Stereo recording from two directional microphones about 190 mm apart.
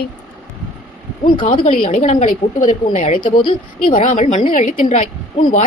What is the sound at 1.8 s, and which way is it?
A woman's voice, 35° left (ahead or behind).